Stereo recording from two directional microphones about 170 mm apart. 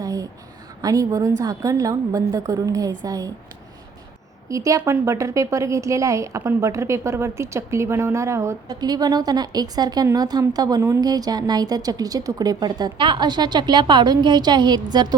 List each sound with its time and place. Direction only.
0.0 s a sound: 20° right (ahead or behind)
0.8 s a woman's voice: 20° right (ahead or behind)
4.4 s a woman's voice: 20° right (ahead or behind)